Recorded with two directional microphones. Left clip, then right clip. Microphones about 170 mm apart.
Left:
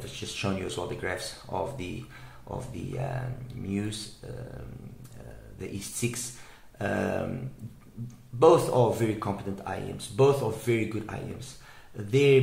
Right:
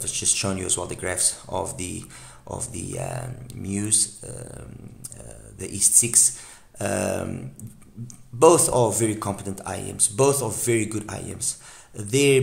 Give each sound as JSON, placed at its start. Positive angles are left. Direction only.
{"t": 0.1, "sound": "speech", "side_deg": -45}
{"t": 5.6, "sound": "speech", "side_deg": -45}
{"t": 8.4, "sound": "speech", "side_deg": -45}